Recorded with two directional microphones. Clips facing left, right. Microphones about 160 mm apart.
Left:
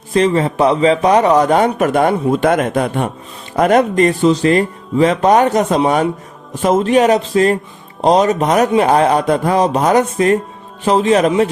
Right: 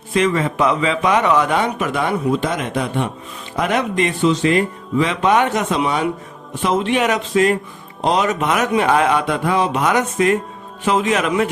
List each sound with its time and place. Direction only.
0.1 s a man's voice: 35° left (ahead or behind)